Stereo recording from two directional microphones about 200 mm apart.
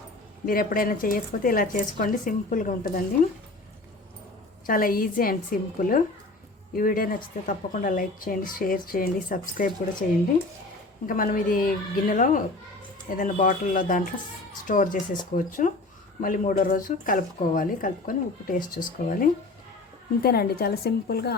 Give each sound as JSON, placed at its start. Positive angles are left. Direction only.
{"t": 0.4, "sound": "speech", "side_deg": 45}
{"t": 4.6, "sound": "speech", "side_deg": 45}